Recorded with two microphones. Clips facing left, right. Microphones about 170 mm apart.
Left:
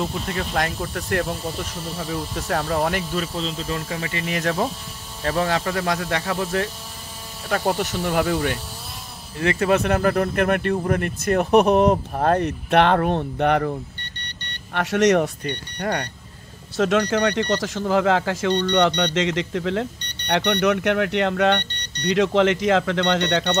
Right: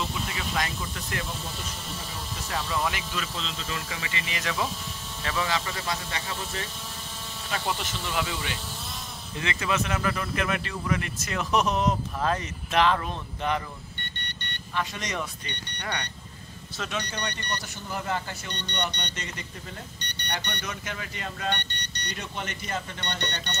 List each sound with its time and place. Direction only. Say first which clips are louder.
0.0 s speech: left 6 dB; 50° left (ahead or behind)
7.4 s speech: left 9 dB; 55° left (ahead or behind)
14.7 s speech: left 14 dB; 75° left (ahead or behind)
15.4 s speech: left 10 dB; 50° left (ahead or behind)
16.7 s speech: left 14 dB; 80° left